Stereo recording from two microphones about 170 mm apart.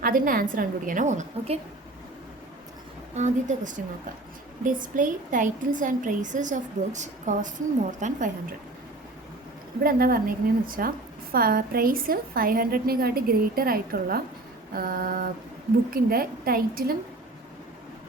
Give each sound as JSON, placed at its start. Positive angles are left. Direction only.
{"t": 0.0, "sound": "a woman's voice", "side_deg": -55}
{"t": 3.2, "sound": "a woman's voice", "side_deg": -45}
{"t": 9.8, "sound": "a woman's voice", "side_deg": -55}